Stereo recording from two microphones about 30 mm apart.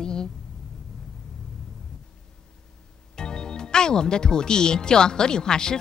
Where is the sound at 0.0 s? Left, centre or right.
Left.